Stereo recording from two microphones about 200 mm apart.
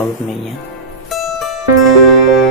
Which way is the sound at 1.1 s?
Centre (ahead or behind).